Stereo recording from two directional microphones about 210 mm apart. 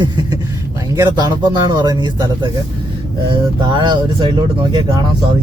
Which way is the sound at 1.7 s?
20° right (ahead or behind).